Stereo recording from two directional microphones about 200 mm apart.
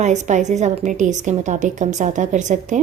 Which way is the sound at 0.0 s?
35° right (ahead or behind).